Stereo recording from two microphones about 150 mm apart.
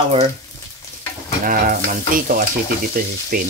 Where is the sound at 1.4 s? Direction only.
70° right (ahead or behind).